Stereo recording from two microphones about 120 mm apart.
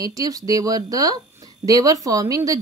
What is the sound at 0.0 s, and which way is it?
A woman's voice, 30° right (ahead or behind).